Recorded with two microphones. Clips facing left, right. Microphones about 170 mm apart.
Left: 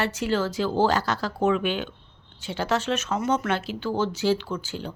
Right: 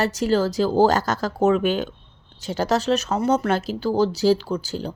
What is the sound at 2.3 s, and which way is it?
Speech, 40° right (ahead or behind).